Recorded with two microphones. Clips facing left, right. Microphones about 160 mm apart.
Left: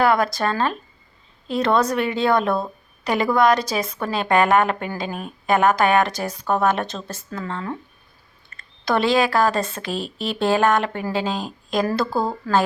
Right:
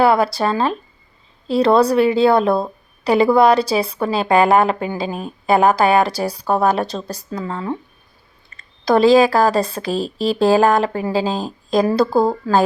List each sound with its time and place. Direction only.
0.0 s a woman's voice: 30° right (ahead or behind)
8.8 s a woman's voice: 35° right (ahead or behind)